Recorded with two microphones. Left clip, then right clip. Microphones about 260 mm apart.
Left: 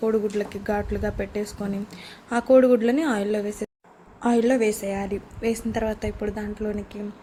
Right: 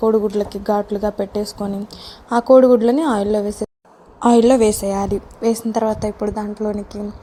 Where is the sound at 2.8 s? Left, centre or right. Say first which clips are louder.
Right 6 dB; centre.